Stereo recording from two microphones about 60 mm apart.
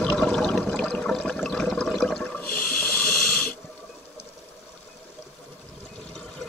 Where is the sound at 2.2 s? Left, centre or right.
Left.